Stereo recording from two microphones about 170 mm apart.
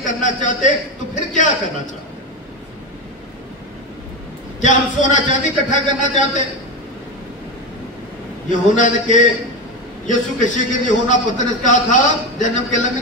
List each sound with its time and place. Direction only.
0.0 s a man's voice: 45° left (ahead or behind)
4.6 s speech: 45° left (ahead or behind)
8.5 s speech: 50° left (ahead or behind)